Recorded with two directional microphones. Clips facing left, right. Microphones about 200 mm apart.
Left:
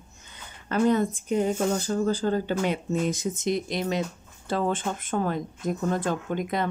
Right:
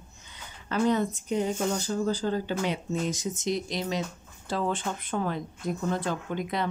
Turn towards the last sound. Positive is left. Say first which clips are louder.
# left 3 dB
turn(degrees=50)  # may be behind; listen again after turning